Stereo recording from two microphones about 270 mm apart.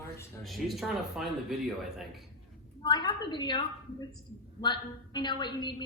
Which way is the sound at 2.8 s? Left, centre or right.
Centre.